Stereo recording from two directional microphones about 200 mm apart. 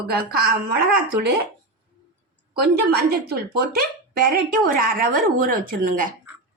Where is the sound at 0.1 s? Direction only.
50° right (ahead or behind).